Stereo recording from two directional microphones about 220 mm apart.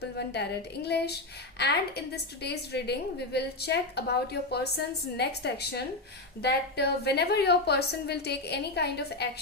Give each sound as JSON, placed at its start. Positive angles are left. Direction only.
{"t": 0.2, "sound": "a woman's voice", "side_deg": 50}